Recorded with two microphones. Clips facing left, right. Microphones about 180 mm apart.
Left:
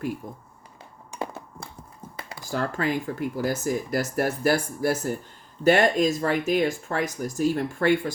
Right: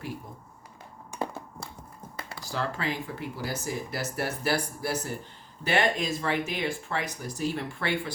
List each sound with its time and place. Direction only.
2.4 s speech: 50° left (ahead or behind)